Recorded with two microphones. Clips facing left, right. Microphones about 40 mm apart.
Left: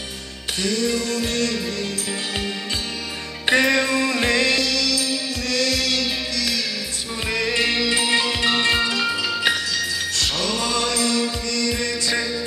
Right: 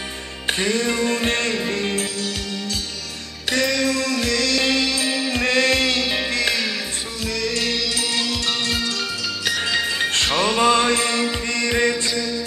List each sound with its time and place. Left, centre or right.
0.5 s music: right
3.4 s music: left
4.6 s music: right
7.2 s music: left
9.6 s music: right